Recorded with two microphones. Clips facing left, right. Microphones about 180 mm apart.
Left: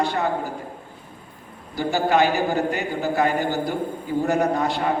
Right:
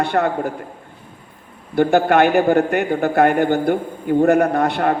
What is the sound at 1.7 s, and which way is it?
A man's voice, 60° right (ahead or behind).